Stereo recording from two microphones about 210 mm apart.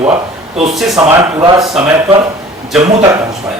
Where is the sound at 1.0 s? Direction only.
15° right (ahead or behind).